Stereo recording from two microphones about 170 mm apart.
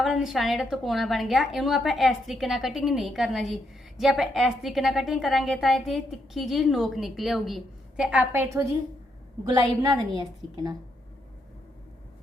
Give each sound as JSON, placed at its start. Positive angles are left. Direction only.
{"t": 0.0, "sound": "a woman's voice", "side_deg": 0}